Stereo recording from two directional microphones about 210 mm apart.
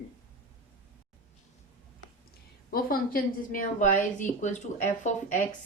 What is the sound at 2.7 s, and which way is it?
A woman's voice, 45° left (ahead or behind).